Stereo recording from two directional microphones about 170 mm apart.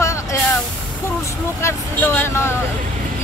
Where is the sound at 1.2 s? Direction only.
15° left (ahead or behind).